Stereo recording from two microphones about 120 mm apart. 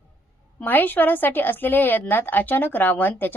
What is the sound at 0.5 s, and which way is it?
A woman's voice, 15° left (ahead or behind).